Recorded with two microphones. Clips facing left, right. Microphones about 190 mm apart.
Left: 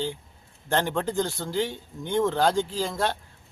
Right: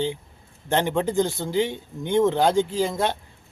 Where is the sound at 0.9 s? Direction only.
5° right (ahead or behind).